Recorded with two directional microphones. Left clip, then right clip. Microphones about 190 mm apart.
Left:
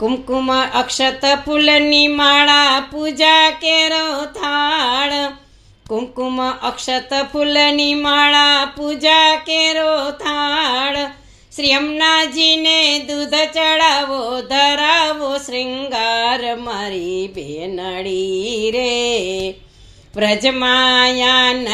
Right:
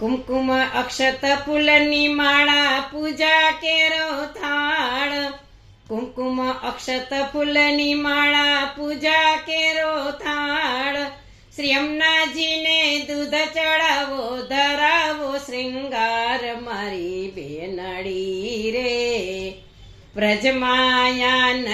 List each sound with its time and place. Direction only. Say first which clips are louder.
0.0 s speech: left 4 dB; 25° left (ahead or behind)
17.7 s music: left 6 dB; 25° left (ahead or behind)
20.1 s speech: left 4 dB; 25° left (ahead or behind)